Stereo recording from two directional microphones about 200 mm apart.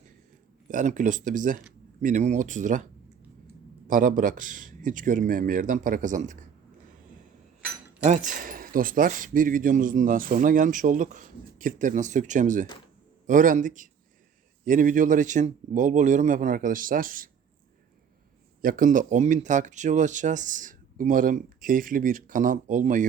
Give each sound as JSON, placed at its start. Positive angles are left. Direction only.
{"t": 0.7, "sound": "speech", "side_deg": -40}
{"t": 3.8, "sound": "speech", "side_deg": -40}
{"t": 8.0, "sound": "speech", "side_deg": -40}
{"t": 18.6, "sound": "speech", "side_deg": -45}